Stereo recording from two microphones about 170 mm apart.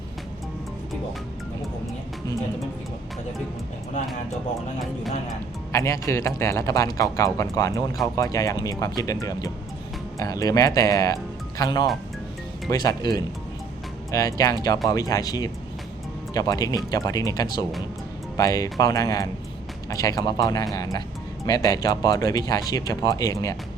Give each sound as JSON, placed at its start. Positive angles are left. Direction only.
{"t": 5.7, "sound": "speech", "side_deg": 15}